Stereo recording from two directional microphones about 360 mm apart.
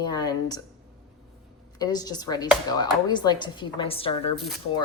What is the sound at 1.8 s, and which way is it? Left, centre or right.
A woman's voice, centre.